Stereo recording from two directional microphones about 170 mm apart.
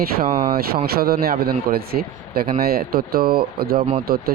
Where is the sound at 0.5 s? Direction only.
65° right (ahead or behind).